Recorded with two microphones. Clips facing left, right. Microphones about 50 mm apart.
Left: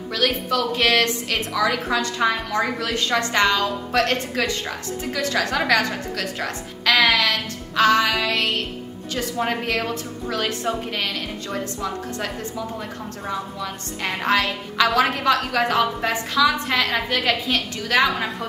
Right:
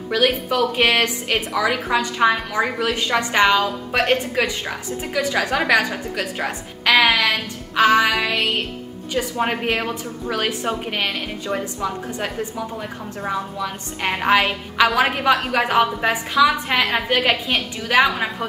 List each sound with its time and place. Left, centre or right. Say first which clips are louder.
0.1 s a woman's voice: right 3 dB; centre